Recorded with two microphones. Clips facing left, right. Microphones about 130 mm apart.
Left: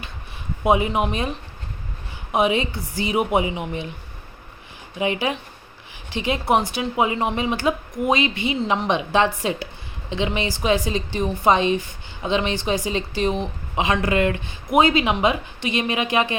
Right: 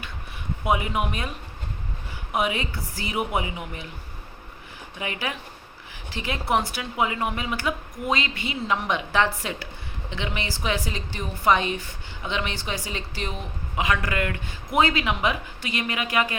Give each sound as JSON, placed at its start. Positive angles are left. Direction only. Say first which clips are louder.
{"t": 0.6, "sound": "a woman's voice", "louder": "left 6 dB", "side_deg": 25}
{"t": 4.9, "sound": "a woman's voice", "louder": "left 8 dB", "side_deg": 20}